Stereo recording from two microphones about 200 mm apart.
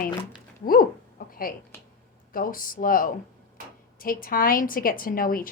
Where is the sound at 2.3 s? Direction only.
45° left (ahead or behind).